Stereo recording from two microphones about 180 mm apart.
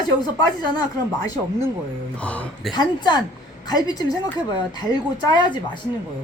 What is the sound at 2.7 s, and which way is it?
Speech, 25° left (ahead or behind).